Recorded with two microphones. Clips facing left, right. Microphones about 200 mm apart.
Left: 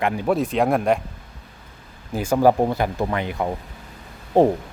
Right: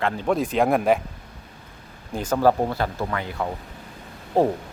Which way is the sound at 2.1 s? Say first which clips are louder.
Left 3 dB; 10° left (ahead or behind).